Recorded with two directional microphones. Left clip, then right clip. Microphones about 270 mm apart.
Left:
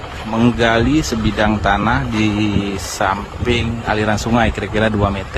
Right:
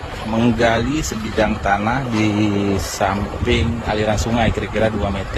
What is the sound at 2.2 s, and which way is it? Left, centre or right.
Speech, centre.